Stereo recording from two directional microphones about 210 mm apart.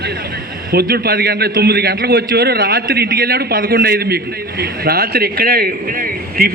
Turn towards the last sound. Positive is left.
turn(degrees=-45)  # may be behind; listen again after turning